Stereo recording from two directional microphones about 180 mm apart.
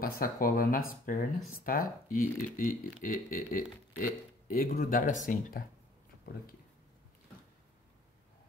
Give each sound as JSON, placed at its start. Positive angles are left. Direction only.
{"t": 0.0, "sound": "speech", "side_deg": 50}